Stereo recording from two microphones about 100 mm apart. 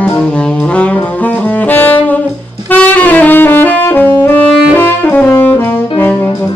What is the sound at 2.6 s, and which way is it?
Saxophone, 20° left (ahead or behind).